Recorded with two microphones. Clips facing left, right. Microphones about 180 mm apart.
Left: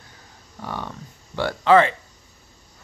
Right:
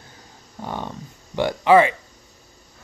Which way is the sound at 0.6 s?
20° right (ahead or behind).